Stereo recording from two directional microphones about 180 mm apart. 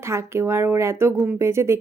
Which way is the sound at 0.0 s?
15° right (ahead or behind).